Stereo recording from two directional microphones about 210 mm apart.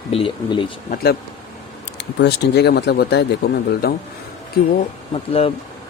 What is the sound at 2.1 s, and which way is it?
Speech, 55° left (ahead or behind).